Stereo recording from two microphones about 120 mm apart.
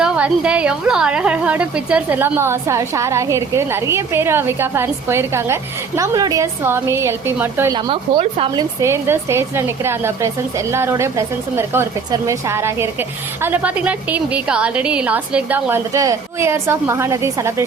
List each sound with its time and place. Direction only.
0.0 s a woman's voice: 10° right (ahead or behind)
7.7 s speech: 45° right (ahead or behind)
8.8 s a woman's voice: 20° right (ahead or behind)